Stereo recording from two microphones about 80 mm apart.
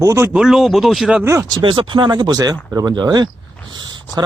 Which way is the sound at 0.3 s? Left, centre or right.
Centre.